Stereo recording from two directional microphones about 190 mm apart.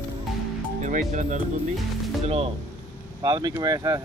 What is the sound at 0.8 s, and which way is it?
Speech, 40° right (ahead or behind).